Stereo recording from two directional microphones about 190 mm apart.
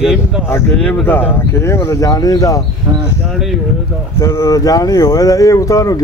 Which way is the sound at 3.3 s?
Centre (ahead or behind).